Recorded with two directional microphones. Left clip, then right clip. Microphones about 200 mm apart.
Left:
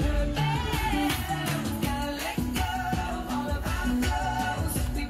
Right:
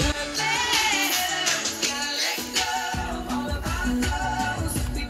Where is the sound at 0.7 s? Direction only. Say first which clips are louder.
Right 6 dB; 50° left (ahead or behind).